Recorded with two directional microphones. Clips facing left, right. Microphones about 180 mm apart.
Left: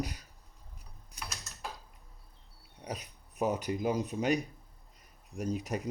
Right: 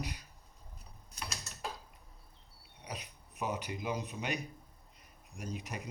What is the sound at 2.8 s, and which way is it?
Speech, 40° left (ahead or behind).